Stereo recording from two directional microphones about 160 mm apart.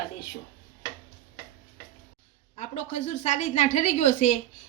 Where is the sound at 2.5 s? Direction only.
45° left (ahead or behind).